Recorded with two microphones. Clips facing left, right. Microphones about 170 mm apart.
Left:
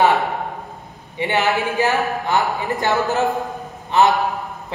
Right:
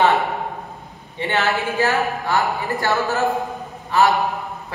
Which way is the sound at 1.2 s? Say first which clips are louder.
Left 2 dB; 15° left (ahead or behind).